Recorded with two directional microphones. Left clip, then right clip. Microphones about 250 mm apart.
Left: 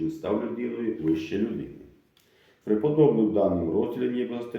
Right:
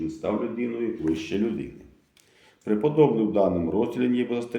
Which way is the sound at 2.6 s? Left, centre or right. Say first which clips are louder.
Right 1 dB; right.